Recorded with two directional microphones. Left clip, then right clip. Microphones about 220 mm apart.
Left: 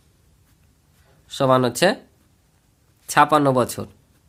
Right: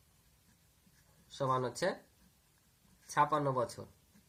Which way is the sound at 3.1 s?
80° left.